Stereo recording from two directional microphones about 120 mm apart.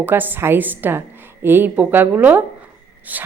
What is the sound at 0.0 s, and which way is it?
Speech, 15° right (ahead or behind).